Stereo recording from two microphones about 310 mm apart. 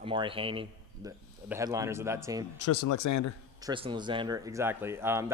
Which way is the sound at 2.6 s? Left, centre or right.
Left.